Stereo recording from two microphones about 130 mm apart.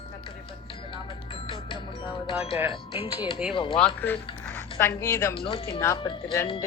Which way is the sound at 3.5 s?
40° left (ahead or behind).